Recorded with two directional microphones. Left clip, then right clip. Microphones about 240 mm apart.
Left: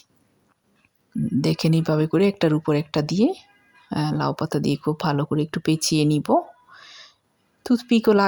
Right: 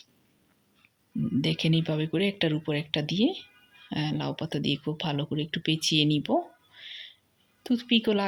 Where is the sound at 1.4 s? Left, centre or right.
Left.